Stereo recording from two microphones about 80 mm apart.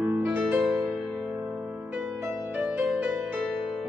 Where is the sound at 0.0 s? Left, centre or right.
Right.